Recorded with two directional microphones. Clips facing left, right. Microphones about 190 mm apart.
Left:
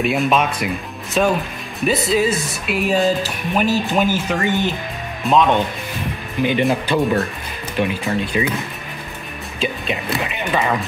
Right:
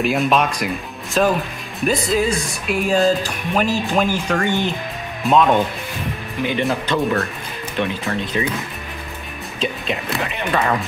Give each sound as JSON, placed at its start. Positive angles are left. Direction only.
{"t": 0.0, "sound": "speech", "side_deg": 0}
{"t": 6.4, "sound": "speech", "side_deg": 15}
{"t": 9.6, "sound": "speech", "side_deg": 0}